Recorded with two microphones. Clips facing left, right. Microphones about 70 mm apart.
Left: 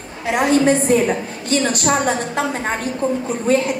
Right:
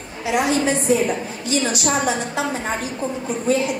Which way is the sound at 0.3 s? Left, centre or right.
Left.